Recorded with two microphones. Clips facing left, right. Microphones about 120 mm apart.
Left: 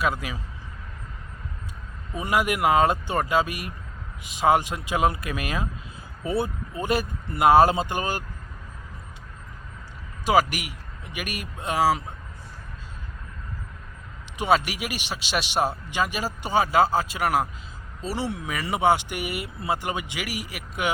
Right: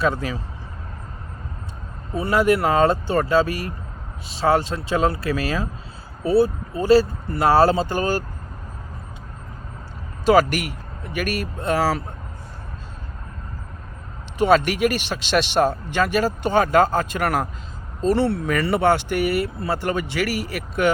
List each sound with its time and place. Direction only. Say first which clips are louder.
0.0 s speech: right 4 dB; 10° left (ahead or behind)
2.1 s speech: right 6 dB; 15° left (ahead or behind)
10.2 s speech: right 5 dB; 10° left (ahead or behind)
14.3 s speech: right 5 dB; 10° left (ahead or behind)